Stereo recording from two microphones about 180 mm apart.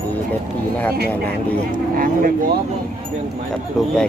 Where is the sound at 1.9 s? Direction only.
50° right (ahead or behind).